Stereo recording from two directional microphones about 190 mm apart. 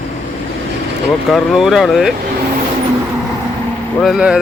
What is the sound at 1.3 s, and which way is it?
Speech, centre (ahead or behind).